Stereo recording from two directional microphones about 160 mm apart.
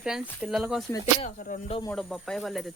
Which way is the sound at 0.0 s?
5° right (ahead or behind).